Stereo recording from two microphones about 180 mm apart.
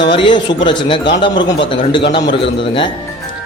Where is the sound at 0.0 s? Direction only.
25° left (ahead or behind).